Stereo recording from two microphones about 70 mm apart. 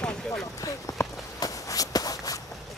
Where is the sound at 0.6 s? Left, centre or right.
Left.